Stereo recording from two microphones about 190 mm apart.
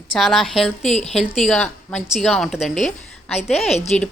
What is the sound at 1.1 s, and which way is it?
A woman's voice, centre (ahead or behind).